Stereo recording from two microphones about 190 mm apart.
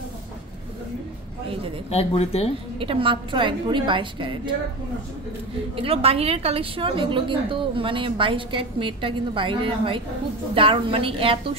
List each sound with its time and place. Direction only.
1.9 s speech: 35° left (ahead or behind)
2.8 s a woman's voice: 30° right (ahead or behind)
5.8 s a woman's voice: 30° right (ahead or behind)